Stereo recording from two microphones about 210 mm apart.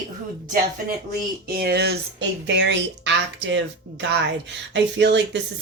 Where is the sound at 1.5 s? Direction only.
50° right (ahead or behind).